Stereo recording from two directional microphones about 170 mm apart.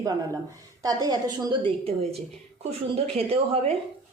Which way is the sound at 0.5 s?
20° right (ahead or behind).